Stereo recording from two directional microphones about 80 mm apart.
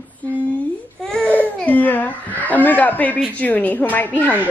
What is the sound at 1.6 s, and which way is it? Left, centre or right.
A woman's voice, left.